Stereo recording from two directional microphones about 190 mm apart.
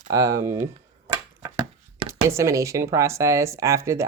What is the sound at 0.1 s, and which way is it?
Speech, 15° right (ahead or behind).